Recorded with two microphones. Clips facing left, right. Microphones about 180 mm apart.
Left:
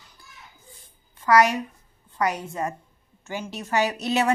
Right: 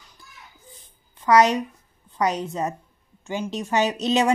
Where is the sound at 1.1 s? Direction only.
20° right (ahead or behind).